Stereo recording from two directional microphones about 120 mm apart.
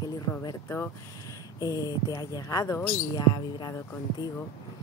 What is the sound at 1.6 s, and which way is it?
Speech, 30° left (ahead or behind).